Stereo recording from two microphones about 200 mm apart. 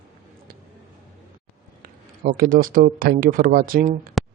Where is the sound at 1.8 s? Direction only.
45° right (ahead or behind).